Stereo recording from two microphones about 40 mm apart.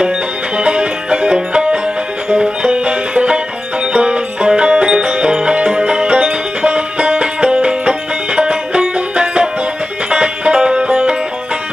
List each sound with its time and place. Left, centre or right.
0.6 s music: right